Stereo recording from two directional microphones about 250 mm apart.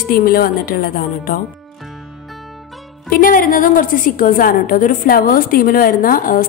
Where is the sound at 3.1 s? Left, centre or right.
Left.